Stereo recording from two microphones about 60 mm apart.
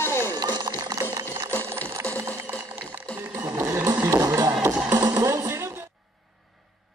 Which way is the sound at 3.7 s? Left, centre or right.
Right.